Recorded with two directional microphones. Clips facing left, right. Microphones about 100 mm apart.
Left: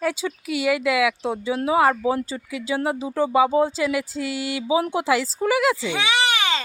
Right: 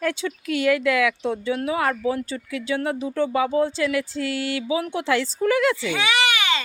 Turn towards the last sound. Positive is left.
turn(degrees=35)  # may be behind; listen again after turning